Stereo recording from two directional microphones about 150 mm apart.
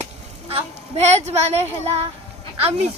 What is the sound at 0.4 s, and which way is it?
Speech, 40° right (ahead or behind).